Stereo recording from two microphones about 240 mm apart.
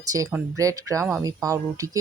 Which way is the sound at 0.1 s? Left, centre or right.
Centre.